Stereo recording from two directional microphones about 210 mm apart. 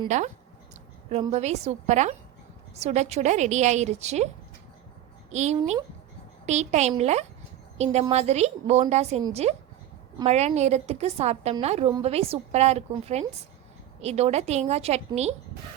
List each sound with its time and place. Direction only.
0.1 s a woman's voice: 35° right (ahead or behind)
1.3 s a woman's voice: 30° right (ahead or behind)
5.3 s a woman's voice: 35° right (ahead or behind)